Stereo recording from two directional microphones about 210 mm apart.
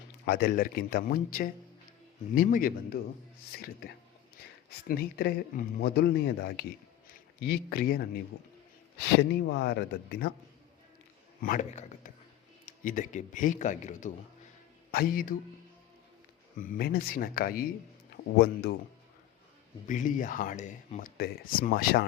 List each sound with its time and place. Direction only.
0.3 s a man's voice: 50° left (ahead or behind)
4.9 s a man's voice: 45° left (ahead or behind)
11.4 s a man's voice: 35° left (ahead or behind)
16.6 s a man's voice: 45° left (ahead or behind)
19.9 s speech: 40° left (ahead or behind)